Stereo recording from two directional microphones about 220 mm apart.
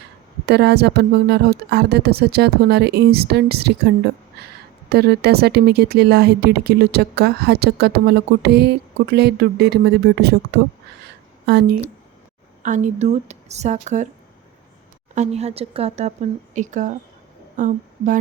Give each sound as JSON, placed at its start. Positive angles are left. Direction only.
{"t": 0.4, "sound": "speech", "side_deg": -50}
{"t": 12.6, "sound": "speech", "side_deg": -35}
{"t": 15.1, "sound": "speech", "side_deg": -30}